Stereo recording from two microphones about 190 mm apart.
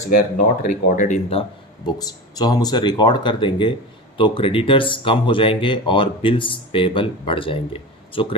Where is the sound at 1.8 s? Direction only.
20° left (ahead or behind).